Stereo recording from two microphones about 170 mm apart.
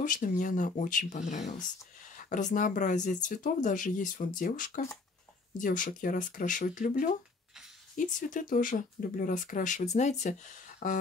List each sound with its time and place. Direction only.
0.0 s speech: 50° left (ahead or behind)